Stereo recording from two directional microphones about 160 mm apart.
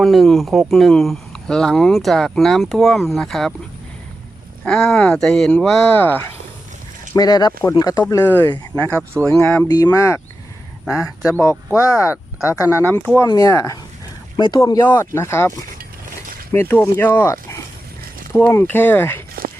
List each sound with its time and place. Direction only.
0.0 s speech: centre (ahead or behind)
4.6 s speech: 5° left (ahead or behind)
7.1 s speech: 25° left (ahead or behind)
8.0 s speech: 15° left (ahead or behind)
8.9 s speech: 15° right (ahead or behind)
9.6 s speech: 25° left (ahead or behind)
11.3 s speech: 20° left (ahead or behind)
14.8 s speech: 15° left (ahead or behind)